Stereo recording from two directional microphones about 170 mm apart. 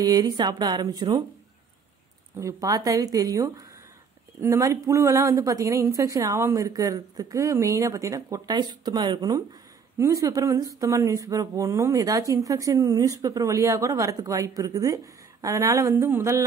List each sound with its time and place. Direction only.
0.0 s speech: 25° right (ahead or behind)
2.3 s a woman's voice: 20° right (ahead or behind)